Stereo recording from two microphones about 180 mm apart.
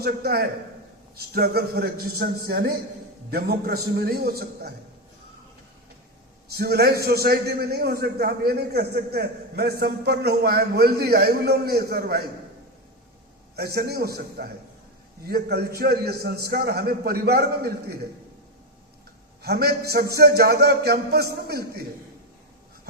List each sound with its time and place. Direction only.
0.0 s a man's voice: 60° right (ahead or behind)
6.5 s a man's voice: 60° right (ahead or behind)
13.6 s a man's voice: 60° right (ahead or behind)
19.4 s a man's voice: 60° right (ahead or behind)